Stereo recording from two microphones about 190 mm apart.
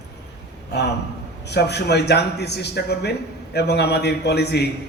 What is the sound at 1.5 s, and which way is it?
A man's voice, 60° left (ahead or behind).